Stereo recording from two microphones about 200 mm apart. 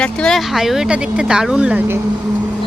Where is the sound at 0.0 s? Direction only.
5° left (ahead or behind).